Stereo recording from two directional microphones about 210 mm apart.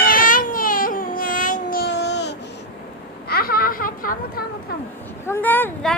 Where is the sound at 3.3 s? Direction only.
45° left (ahead or behind).